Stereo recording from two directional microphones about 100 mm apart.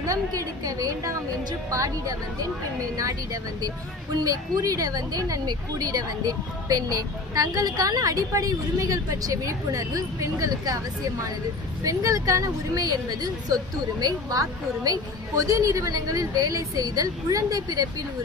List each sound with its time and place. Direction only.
0.0 s speech: 35° right (ahead or behind)
4.2 s speech: 40° right (ahead or behind)